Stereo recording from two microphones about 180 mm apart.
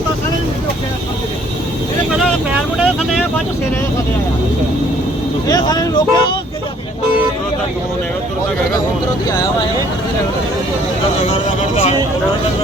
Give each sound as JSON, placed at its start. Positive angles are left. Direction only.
{"t": 2.7, "sound": "speech", "side_deg": 0}
{"t": 5.5, "sound": "speech", "side_deg": 20}